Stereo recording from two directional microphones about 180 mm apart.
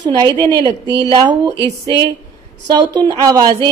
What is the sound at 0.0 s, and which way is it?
A woman's voice, 20° right (ahead or behind).